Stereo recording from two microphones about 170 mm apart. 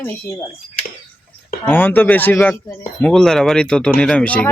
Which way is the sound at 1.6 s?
10° left (ahead or behind).